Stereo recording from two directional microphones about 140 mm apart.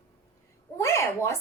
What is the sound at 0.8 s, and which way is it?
Speech, 20° left (ahead or behind).